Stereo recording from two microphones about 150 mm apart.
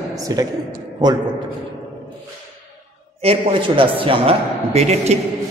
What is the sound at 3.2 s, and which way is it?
A man's voice, 40° right (ahead or behind).